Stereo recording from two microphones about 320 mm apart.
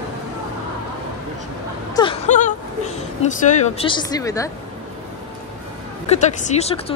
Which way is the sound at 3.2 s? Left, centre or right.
Centre.